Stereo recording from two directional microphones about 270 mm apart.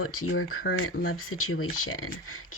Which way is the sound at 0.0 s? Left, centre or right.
Left.